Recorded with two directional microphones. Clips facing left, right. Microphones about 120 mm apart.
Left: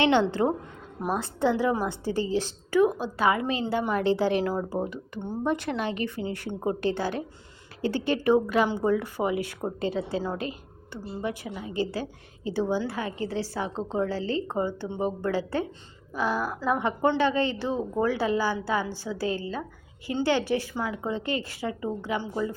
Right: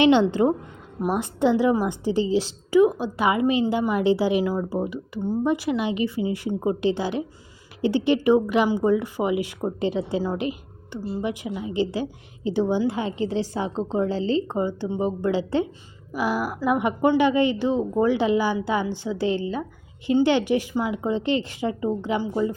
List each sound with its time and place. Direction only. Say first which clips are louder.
0.0 s a woman's voice: right 5 dB; 15° right (ahead or behind)